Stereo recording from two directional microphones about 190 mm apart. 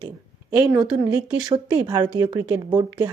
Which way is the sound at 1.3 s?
20° right (ahead or behind).